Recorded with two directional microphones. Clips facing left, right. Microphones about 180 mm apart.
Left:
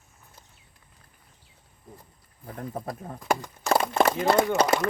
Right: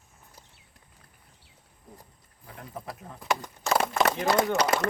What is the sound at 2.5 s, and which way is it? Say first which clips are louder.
Speech: left 6 dB; 45° left (ahead or behind).